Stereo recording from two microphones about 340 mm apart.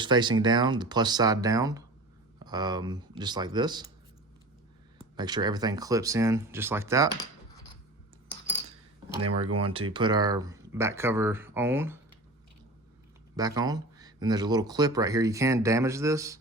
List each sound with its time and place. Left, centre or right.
0.0 s speech: centre
5.1 s speech: centre
9.6 s speech: centre
13.3 s speech: centre